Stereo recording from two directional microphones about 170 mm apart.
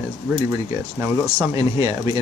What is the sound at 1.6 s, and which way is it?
Speech, 20° right (ahead or behind).